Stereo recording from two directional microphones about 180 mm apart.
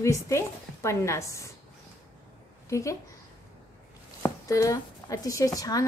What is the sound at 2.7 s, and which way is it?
Speech, 15° left (ahead or behind).